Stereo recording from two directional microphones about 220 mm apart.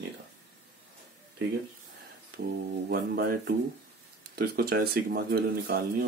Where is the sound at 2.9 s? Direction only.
45° right (ahead or behind).